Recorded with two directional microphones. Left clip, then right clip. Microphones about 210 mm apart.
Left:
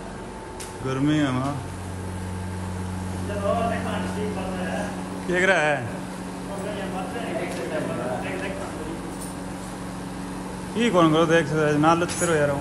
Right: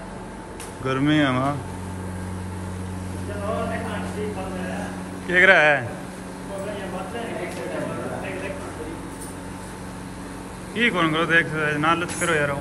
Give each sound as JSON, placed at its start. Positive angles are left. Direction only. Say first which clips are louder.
{"t": 0.8, "sound": "speech", "louder": "right 3 dB", "side_deg": 10}
{"t": 5.3, "sound": "speech", "louder": "right 6 dB", "side_deg": 10}
{"t": 10.8, "sound": "a man's voice", "louder": "left 2 dB", "side_deg": 20}